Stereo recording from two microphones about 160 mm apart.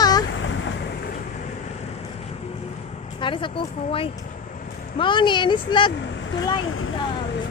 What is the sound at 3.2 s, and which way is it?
Speech, 30° left (ahead or behind).